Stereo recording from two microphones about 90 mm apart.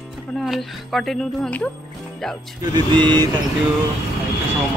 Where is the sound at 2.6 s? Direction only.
55° right (ahead or behind).